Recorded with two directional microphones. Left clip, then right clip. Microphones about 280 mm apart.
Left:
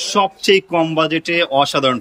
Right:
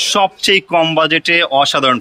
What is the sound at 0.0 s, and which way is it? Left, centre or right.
Speech, centre.